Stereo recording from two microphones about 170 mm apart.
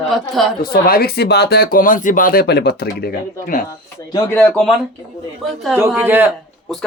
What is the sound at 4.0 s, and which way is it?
Speech, 15° left (ahead or behind).